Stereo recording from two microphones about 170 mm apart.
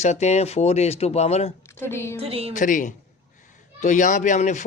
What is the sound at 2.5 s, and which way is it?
Speech, 50° left (ahead or behind).